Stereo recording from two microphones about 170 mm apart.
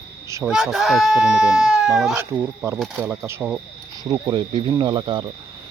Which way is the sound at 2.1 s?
15° right (ahead or behind).